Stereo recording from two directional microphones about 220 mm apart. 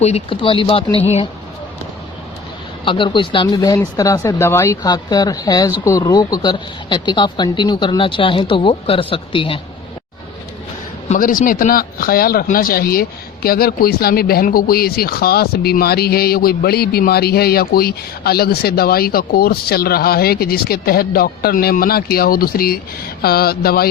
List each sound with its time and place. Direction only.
0.0 s speech: 25° left (ahead or behind)
2.8 s speech: 20° left (ahead or behind)
11.1 s speech: 35° left (ahead or behind)